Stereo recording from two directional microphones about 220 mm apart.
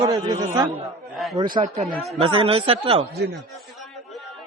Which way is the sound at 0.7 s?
Centre (ahead or behind).